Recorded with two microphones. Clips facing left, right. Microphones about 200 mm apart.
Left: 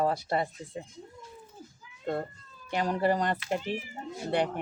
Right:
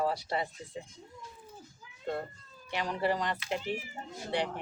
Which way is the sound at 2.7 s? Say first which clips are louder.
Left 4 dB; 45° left (ahead or behind).